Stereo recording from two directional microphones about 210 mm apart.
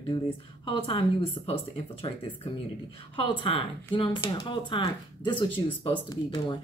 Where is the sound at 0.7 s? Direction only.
25° left (ahead or behind).